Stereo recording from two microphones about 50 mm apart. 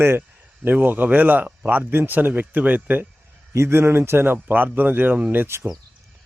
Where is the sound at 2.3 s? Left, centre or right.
Right.